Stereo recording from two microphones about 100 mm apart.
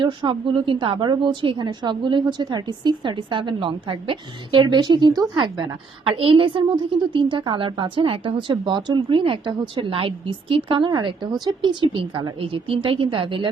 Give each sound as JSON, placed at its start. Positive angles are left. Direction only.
{"t": 0.0, "sound": "a woman's voice", "side_deg": -55}